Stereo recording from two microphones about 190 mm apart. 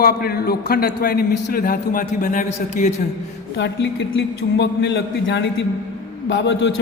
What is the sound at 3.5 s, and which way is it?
A man's voice, 65° left (ahead or behind).